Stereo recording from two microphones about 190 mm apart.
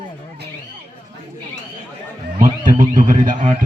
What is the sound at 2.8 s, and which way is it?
Speech, 45° right (ahead or behind).